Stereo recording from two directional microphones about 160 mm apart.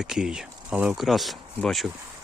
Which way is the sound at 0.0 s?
5° right (ahead or behind).